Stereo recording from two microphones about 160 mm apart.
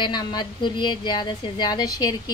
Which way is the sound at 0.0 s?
25° left (ahead or behind).